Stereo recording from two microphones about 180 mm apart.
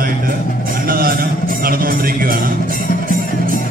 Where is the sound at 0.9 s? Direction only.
55° right (ahead or behind).